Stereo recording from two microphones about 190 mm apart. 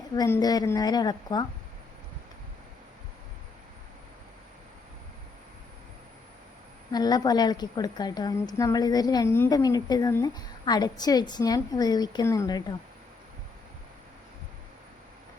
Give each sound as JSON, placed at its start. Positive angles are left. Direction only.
{"t": 0.2, "sound": "a woman's voice", "side_deg": 20}
{"t": 6.9, "sound": "a woman's voice", "side_deg": 20}